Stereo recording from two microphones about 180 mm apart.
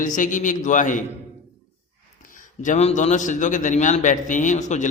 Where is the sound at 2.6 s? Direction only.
40° left (ahead or behind).